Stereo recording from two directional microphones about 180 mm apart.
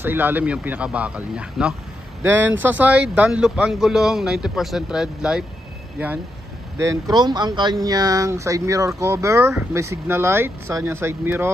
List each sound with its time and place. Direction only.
0.0 s a man's voice: 10° right (ahead or behind)
6.8 s speech: 20° right (ahead or behind)